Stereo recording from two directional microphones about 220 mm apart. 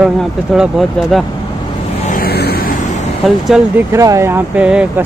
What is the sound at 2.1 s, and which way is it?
Vehicle, 45° left (ahead or behind).